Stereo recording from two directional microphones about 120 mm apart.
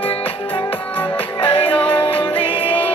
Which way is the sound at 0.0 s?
45° left (ahead or behind).